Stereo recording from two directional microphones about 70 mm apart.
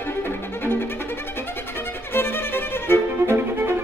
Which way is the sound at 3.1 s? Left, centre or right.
Right.